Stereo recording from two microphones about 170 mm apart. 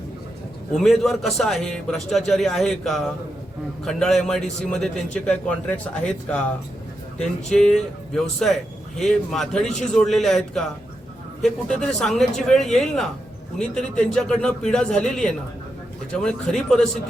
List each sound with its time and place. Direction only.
0.8 s speech: centre (ahead or behind)
7.5 s speech: 5° left (ahead or behind)